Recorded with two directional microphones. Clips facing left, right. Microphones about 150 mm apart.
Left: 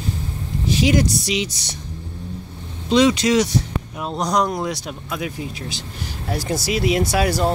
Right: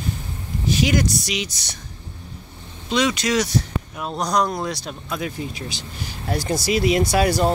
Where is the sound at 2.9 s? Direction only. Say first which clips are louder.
Left 5 dB; 30° left (ahead or behind).